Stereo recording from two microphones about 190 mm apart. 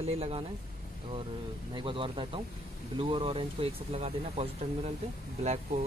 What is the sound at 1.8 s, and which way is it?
Speech, 25° right (ahead or behind).